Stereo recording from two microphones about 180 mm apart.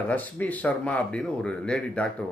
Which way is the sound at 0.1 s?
10° left (ahead or behind).